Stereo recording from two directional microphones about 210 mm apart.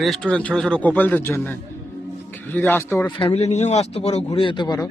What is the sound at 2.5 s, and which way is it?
Speech, 10° left (ahead or behind).